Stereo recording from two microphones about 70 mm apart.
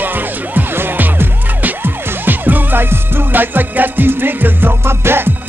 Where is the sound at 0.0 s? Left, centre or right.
Right.